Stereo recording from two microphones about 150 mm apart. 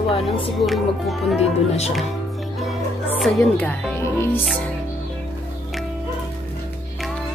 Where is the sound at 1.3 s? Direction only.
45° left (ahead or behind).